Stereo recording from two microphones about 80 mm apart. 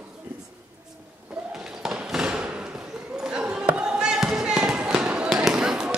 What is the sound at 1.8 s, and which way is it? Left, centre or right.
Fireworks, centre.